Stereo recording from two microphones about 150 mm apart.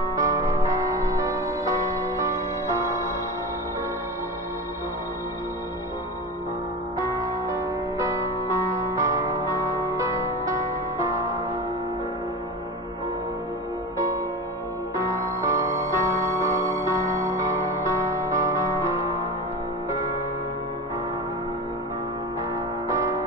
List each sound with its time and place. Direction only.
0.1 s music: 20° right (ahead or behind)
7.0 s music: 20° right (ahead or behind)
15.0 s music: 20° right (ahead or behind)
22.8 s music: 20° right (ahead or behind)